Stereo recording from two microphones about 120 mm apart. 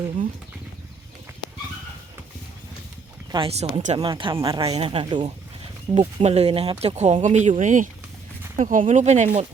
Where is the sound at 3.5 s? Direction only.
65° right (ahead or behind).